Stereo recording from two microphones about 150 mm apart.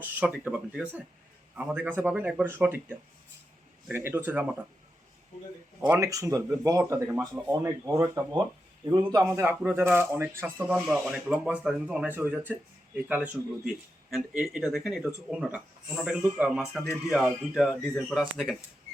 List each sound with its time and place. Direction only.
0.0 s speech: 10° right (ahead or behind)
3.8 s speech: 15° right (ahead or behind)
6.0 s speech: 20° right (ahead or behind)
14.1 s speech: centre (ahead or behind)